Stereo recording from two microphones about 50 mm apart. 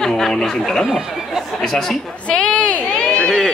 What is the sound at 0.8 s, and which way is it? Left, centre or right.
Speech, centre.